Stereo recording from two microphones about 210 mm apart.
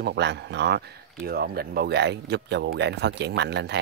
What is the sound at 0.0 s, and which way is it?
Speech, 55° right (ahead or behind).